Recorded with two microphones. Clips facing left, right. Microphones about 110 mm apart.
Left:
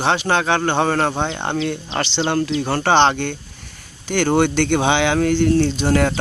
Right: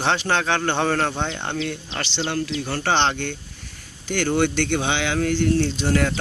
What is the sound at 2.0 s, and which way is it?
Speech, 75° left (ahead or behind).